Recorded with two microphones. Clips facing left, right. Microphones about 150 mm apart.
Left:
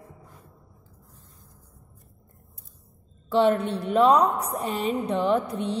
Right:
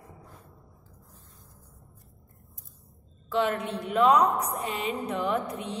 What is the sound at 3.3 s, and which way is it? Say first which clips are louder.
A woman's voice: left 6 dB; 30° left (ahead or behind).